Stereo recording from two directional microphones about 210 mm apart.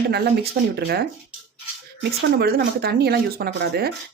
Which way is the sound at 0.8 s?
50° right (ahead or behind).